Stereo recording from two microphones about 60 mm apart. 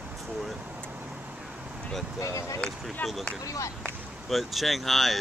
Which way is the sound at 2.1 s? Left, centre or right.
Left.